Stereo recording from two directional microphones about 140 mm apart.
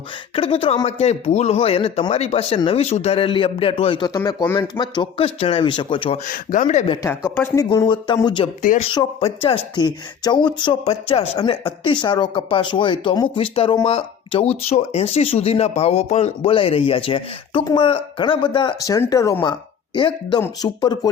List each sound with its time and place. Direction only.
0.3 s a man's voice: 40° left (ahead or behind)
6.2 s speech: 75° left (ahead or behind)
7.3 s speech: 20° left (ahead or behind); by 8.4 s 35° left (ahead or behind)
8.7 s speech: 70° left (ahead or behind)
9.2 s a man's voice: 45° left (ahead or behind)
9.7 s speech: 30° left (ahead or behind)
10.8 s speech: 45° left (ahead or behind)
18.8 s speech: 25° left (ahead or behind)
19.4 s speech: 35° left (ahead or behind)